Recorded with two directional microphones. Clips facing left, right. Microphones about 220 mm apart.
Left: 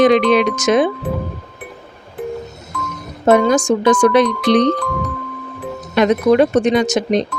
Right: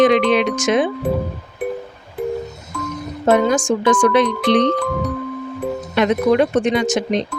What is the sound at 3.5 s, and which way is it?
Speech, 40° left (ahead or behind).